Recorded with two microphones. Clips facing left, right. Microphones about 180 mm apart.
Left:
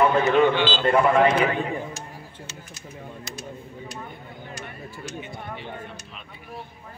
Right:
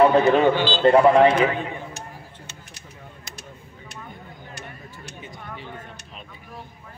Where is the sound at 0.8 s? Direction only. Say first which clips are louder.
Right 5 dB; 30° right (ahead or behind).